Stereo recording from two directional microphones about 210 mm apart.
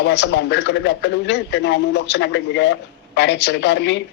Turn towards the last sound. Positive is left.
turn(degrees=55)  # may be behind; listen again after turning